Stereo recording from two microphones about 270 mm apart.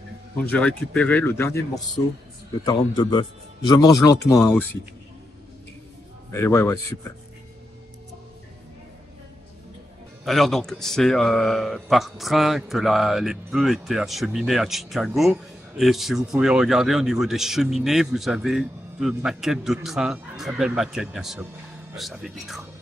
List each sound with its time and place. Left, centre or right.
0.4 s a man's voice: centre
6.3 s a man's voice: centre
10.2 s a man's voice: centre